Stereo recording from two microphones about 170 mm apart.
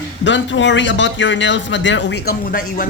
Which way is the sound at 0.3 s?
90° left.